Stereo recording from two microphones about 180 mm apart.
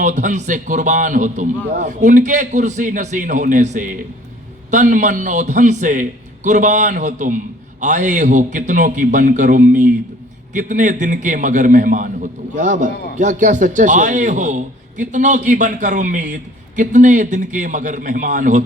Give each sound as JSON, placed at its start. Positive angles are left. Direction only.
{"t": 0.0, "sound": "a man's voice", "side_deg": -45}